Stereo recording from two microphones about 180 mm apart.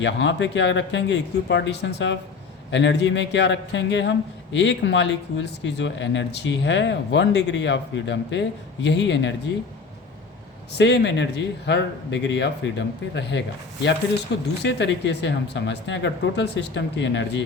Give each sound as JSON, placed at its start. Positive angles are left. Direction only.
{"t": 0.0, "sound": "speech", "side_deg": 90}
{"t": 2.6, "sound": "speech", "side_deg": 85}
{"t": 10.7, "sound": "speech", "side_deg": 70}
{"t": 14.6, "sound": "speech", "side_deg": 75}